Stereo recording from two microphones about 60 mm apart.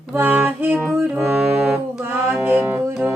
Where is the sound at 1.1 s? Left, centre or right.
Centre.